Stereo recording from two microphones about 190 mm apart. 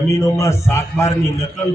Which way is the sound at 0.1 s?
15° left (ahead or behind).